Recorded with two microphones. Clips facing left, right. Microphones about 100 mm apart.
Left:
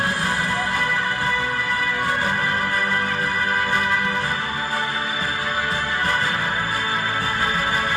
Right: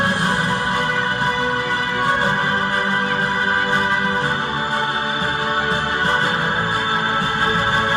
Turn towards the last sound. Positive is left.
turn(degrees=-25)  # may be behind; listen again after turning